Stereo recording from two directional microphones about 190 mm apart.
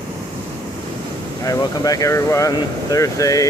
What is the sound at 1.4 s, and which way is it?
Speech, 20° left (ahead or behind).